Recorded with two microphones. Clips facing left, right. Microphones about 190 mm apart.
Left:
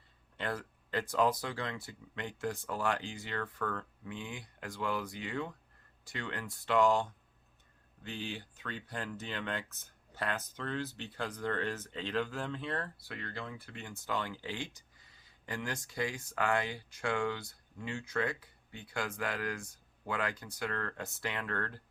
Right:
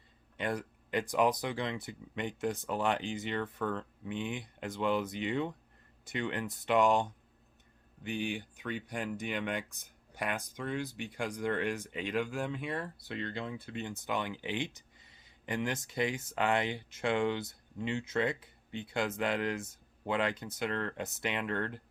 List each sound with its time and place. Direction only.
0.3 s speech: 15° right (ahead or behind)